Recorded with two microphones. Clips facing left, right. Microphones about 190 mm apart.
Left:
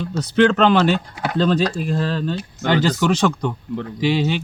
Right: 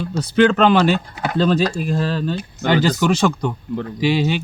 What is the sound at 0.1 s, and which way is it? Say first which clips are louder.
Speech: right 1 dB; 10° right (ahead or behind).